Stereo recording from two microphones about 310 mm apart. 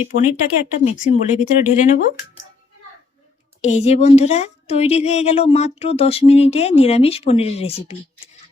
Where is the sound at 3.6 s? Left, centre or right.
Left.